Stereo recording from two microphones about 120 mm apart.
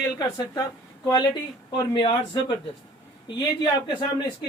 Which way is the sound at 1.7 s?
40° left (ahead or behind).